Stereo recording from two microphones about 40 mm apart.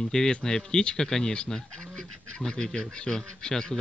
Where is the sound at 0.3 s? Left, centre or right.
Centre.